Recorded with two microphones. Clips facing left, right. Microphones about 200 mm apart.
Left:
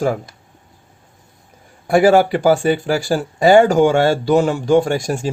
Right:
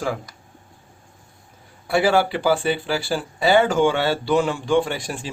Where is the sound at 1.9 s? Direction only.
45° left (ahead or behind).